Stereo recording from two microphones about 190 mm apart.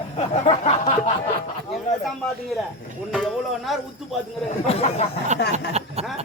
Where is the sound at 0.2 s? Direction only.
35° left (ahead or behind).